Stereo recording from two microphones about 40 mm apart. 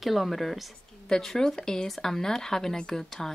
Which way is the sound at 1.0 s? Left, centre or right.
Centre.